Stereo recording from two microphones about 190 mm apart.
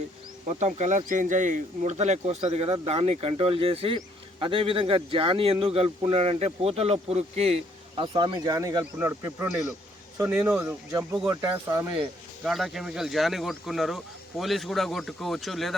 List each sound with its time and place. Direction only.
0.4 s speech: 40° right (ahead or behind); by 11.3 s 5° right (ahead or behind)
11.3 s speech: 15° right (ahead or behind)
12.5 s speech: centre (ahead or behind)